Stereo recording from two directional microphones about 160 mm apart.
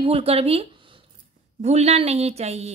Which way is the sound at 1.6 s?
45° right (ahead or behind).